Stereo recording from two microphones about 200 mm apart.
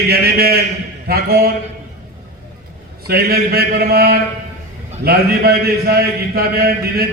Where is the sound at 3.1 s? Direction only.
50° right (ahead or behind).